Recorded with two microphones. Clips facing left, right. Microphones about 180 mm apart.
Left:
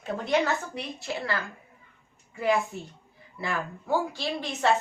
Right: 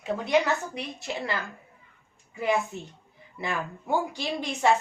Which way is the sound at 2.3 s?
20° right (ahead or behind).